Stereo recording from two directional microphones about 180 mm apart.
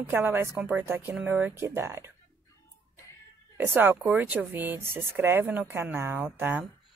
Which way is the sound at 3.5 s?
10° right (ahead or behind).